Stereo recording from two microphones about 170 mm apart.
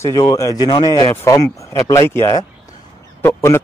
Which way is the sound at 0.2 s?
20° left (ahead or behind).